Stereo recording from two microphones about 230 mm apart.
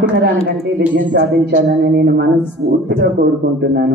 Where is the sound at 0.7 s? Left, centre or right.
Right.